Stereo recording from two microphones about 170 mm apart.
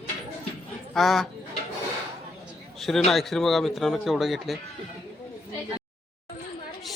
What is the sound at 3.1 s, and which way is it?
A man's voice, centre (ahead or behind).